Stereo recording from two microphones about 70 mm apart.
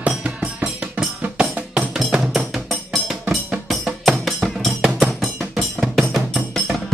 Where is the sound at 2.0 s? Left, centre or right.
Centre.